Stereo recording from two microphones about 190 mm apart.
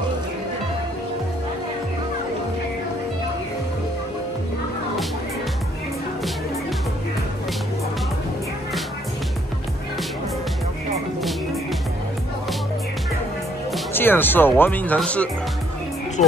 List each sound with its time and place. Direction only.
13.9 s speech: 10° left (ahead or behind)
16.2 s speech: 40° left (ahead or behind)